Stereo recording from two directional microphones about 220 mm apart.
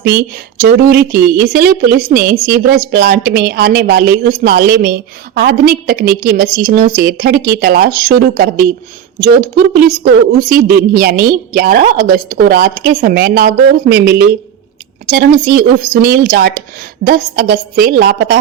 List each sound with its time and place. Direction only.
0.0 s a woman's voice: 45° right (ahead or behind)